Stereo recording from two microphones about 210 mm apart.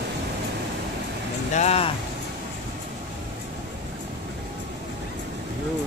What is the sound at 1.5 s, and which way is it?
Speech, 30° left (ahead or behind).